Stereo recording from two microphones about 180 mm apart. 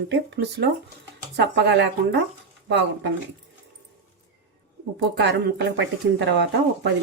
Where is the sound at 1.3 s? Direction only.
75° right (ahead or behind).